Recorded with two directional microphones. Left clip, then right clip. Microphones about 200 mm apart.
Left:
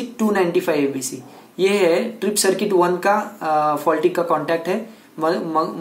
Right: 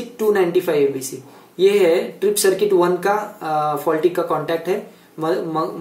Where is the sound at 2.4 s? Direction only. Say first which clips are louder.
Right 1 dB; 30° left (ahead or behind).